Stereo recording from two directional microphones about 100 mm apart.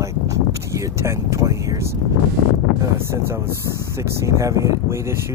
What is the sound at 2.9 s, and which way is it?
Speech, 25° right (ahead or behind).